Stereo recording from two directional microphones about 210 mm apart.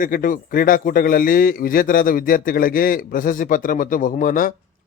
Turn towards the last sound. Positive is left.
turn(degrees=40)  # may be behind; listen again after turning